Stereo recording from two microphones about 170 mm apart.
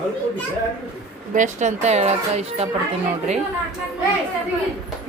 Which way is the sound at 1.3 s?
45° right (ahead or behind).